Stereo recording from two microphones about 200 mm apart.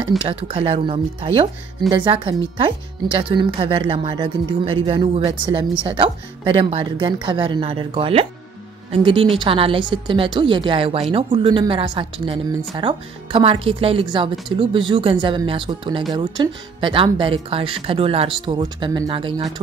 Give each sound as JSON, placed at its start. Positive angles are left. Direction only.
{"t": 0.2, "sound": "speech", "side_deg": -25}